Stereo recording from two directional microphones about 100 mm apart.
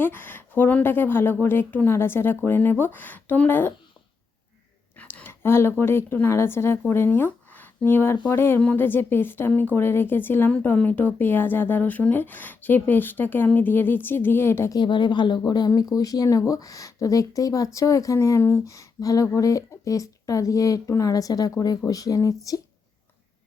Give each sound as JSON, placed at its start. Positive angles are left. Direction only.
{"t": 0.0, "sound": "speech", "side_deg": 20}
{"t": 4.9, "sound": "speech", "side_deg": 20}
{"t": 14.7, "sound": "speech", "side_deg": 50}